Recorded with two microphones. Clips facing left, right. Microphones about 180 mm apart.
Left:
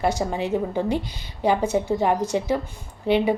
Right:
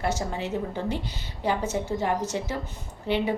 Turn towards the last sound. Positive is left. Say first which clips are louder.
# left 6 dB
turn(degrees=15)  # may be behind; listen again after turning